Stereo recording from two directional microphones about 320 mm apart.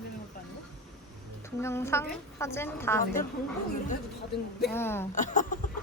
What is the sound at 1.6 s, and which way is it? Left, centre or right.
A woman's voice, centre.